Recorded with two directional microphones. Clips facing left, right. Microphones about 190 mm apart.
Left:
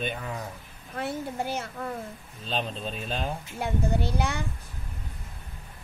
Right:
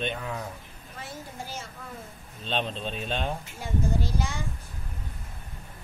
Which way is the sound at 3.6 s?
60° left (ahead or behind).